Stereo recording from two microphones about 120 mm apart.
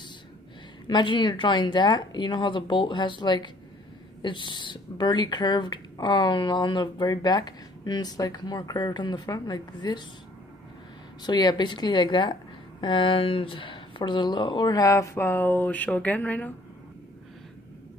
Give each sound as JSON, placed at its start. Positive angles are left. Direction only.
{"t": 0.8, "sound": "speech", "side_deg": 40}
{"t": 11.2, "sound": "speech", "side_deg": 35}